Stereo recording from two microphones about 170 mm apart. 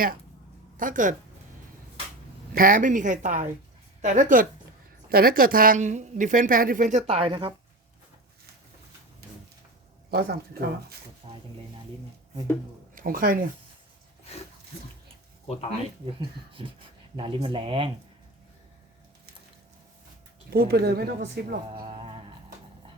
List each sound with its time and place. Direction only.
0.8 s a woman's voice: 50° right (ahead or behind)
2.5 s a woman's voice: 55° right (ahead or behind)
5.0 s a woman's voice: 60° right (ahead or behind)
7.1 s speech: 30° right (ahead or behind)
10.1 s speech: 65° right (ahead or behind)
11.2 s speech: 30° right (ahead or behind)
12.9 s speech: 55° right (ahead or behind)
16.5 s speech: 30° right (ahead or behind)
20.5 s speech: 65° right (ahead or behind)
21.8 s speech: 30° right (ahead or behind)